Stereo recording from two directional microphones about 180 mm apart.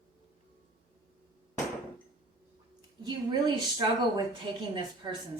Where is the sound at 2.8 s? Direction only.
25° right (ahead or behind).